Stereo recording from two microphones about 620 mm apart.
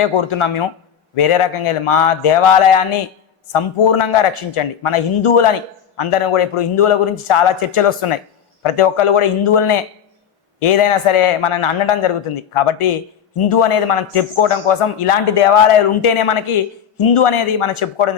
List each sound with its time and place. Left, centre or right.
0.0 s a man's voice: left